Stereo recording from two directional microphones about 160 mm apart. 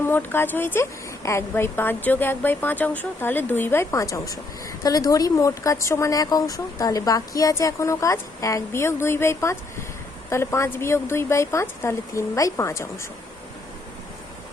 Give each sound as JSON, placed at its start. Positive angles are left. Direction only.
{"t": 0.0, "sound": "speech", "side_deg": 15}